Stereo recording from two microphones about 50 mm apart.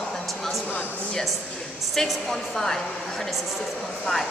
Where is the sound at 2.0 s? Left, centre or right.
Centre.